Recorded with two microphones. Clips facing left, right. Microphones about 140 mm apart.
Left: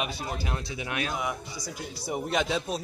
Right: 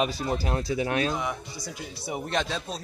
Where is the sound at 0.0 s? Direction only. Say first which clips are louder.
Right 6 dB; 35° right (ahead or behind).